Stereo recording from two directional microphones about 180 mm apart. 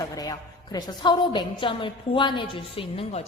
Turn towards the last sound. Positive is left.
turn(degrees=30)  # may be behind; listen again after turning